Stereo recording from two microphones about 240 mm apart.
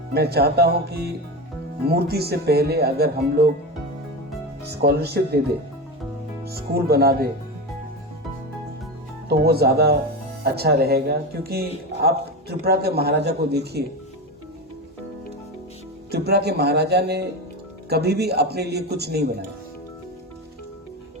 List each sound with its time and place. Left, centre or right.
0.1 s a man's voice: right
4.7 s speech: right
6.4 s a man's voice: right
9.3 s a man's voice: right
16.1 s speech: right